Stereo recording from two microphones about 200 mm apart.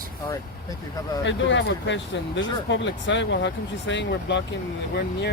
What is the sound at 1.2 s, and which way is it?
Speech, 65° left (ahead or behind).